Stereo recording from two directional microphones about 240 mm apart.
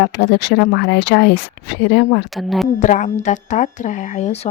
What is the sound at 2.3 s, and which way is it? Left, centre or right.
Speech, centre.